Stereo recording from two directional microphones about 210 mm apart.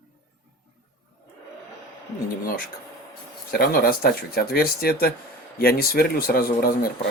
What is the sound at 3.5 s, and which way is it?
Speech, 45° left (ahead or behind).